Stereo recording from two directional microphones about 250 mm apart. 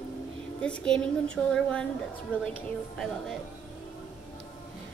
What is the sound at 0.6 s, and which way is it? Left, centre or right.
A woman's voice, centre.